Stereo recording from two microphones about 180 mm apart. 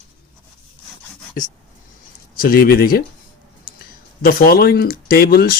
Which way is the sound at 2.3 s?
55° left (ahead or behind).